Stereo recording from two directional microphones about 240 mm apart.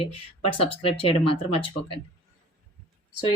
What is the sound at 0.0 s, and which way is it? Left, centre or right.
Speech, left.